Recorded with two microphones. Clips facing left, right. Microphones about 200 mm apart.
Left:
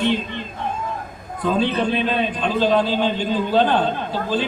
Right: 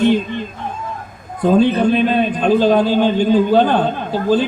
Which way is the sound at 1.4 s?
50° right (ahead or behind).